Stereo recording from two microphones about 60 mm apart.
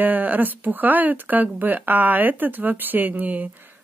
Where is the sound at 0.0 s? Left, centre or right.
Right.